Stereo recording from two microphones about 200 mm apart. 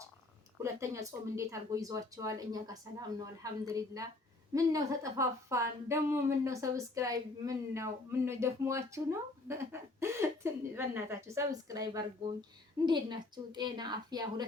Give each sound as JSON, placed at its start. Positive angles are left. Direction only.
{"t": 0.6, "sound": "a woman's voice", "side_deg": -15}